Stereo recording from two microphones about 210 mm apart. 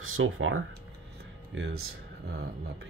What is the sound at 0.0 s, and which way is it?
Speech, 75° right (ahead or behind).